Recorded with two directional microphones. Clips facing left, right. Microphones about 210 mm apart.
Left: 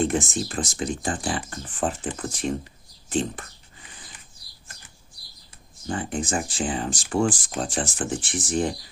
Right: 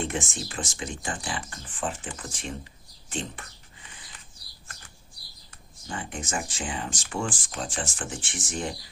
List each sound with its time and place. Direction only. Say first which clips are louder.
0.0 s speech: left 7 dB; 40° left (ahead or behind)
5.9 s speech: left 7 dB; 35° left (ahead or behind)